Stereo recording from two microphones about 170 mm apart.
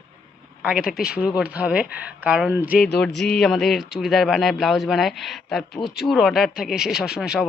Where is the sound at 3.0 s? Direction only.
5° left (ahead or behind).